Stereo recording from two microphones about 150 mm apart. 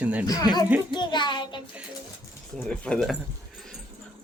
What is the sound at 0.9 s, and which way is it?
Music, 30° left (ahead or behind).